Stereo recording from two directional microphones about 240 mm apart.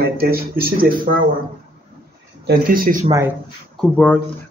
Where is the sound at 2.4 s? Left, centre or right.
Right.